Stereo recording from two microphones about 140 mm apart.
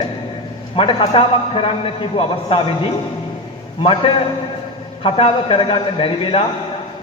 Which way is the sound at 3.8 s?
40° left (ahead or behind).